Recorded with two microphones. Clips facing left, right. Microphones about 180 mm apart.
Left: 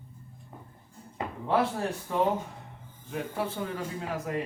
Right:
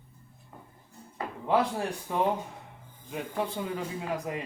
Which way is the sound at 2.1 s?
15° right (ahead or behind).